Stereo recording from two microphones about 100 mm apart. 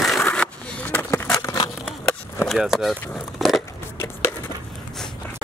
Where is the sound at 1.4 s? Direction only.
35° left (ahead or behind).